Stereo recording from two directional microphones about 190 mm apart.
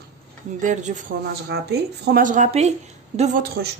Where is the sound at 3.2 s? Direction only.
50° right (ahead or behind).